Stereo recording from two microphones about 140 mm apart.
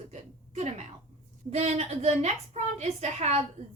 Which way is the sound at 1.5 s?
50° right (ahead or behind).